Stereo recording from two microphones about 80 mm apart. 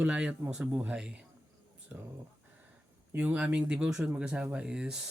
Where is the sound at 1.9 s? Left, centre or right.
Right.